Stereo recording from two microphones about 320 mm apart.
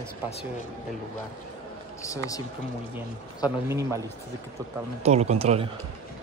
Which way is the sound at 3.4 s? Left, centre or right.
Centre.